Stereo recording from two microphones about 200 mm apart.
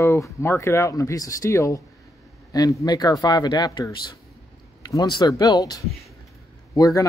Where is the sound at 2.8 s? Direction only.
20° left (ahead or behind).